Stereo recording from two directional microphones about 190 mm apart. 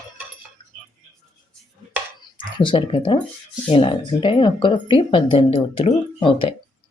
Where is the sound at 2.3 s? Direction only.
25° left (ahead or behind).